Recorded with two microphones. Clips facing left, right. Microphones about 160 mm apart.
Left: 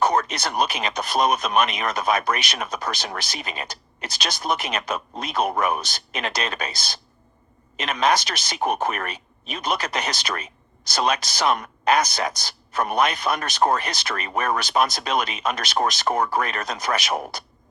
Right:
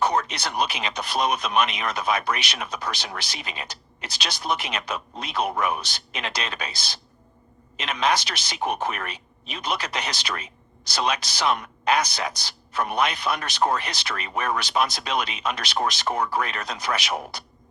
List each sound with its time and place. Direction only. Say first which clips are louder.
0.0 s speech: left 2 dB; 45° left (ahead or behind)